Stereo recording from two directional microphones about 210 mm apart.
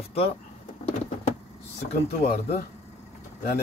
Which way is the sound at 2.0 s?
45° left (ahead or behind).